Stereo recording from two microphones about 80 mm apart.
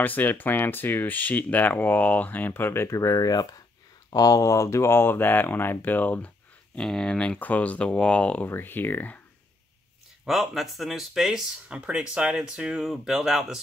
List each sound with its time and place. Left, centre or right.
0.0 s speech: left
8.5 s speech: left
10.2 s speech: centre